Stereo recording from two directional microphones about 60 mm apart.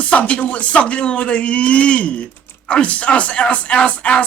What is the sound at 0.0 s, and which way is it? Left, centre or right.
Speech, left.